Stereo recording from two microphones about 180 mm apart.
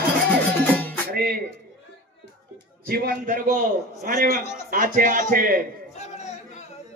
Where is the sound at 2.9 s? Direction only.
55° right (ahead or behind).